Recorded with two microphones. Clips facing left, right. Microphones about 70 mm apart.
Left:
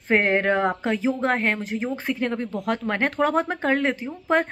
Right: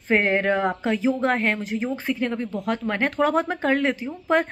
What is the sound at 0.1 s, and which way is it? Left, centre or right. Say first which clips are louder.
Speech: even; left.